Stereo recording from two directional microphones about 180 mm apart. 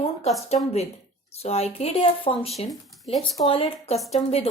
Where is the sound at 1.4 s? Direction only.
35° left (ahead or behind).